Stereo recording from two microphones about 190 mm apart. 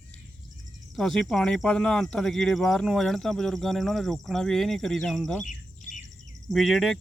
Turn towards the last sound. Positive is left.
turn(degrees=0)  # may be behind; listen again after turning